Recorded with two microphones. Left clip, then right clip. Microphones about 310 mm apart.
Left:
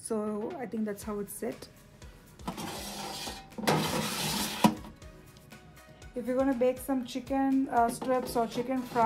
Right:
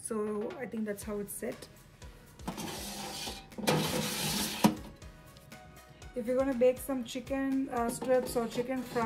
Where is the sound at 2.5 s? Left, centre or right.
Centre.